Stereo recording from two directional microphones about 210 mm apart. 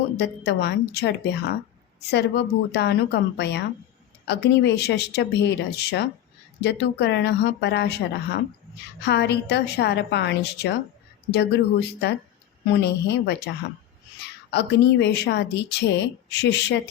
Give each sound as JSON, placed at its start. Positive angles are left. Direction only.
{"t": 0.2, "sound": "speech", "side_deg": 50}
{"t": 14.5, "sound": "speech", "side_deg": 55}